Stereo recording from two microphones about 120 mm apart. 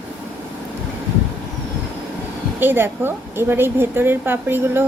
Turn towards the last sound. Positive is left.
turn(degrees=-20)  # may be behind; listen again after turning